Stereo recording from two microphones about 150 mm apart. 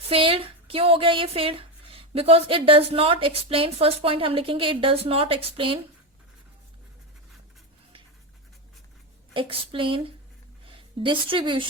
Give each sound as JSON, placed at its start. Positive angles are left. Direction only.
{"t": 0.1, "sound": "speech", "side_deg": -35}
{"t": 9.3, "sound": "a woman's voice", "side_deg": -35}